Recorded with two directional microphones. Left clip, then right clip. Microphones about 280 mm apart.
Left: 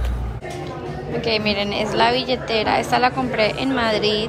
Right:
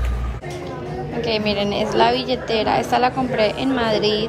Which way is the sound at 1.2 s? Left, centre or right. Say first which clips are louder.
Even; centre.